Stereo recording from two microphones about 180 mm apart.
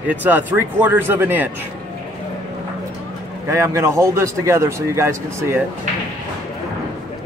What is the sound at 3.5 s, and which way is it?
A man's voice, 15° right (ahead or behind).